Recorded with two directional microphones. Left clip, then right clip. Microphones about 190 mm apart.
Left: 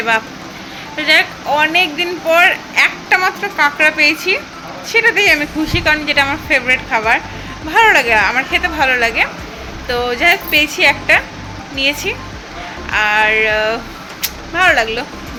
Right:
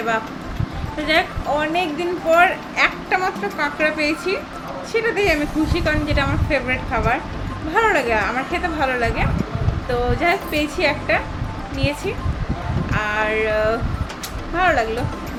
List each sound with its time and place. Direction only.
0.9 s speech: centre (ahead or behind)
14.2 s vehicle: centre (ahead or behind)